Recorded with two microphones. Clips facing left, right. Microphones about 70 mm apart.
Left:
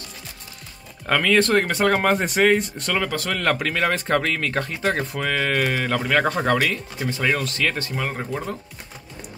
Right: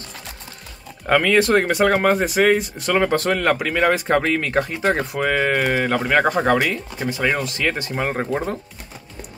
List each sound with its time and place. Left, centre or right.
1.0 s speech: centre
3.0 s speech: right
3.3 s speech: centre; by 8.5 s right